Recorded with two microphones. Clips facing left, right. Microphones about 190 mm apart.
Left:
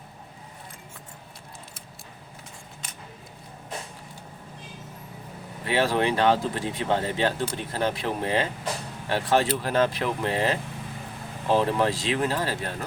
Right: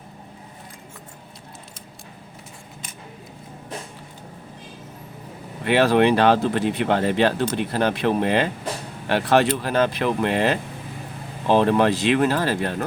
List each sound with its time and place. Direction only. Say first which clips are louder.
5.6 s speech: right 7 dB; 70° right (ahead or behind)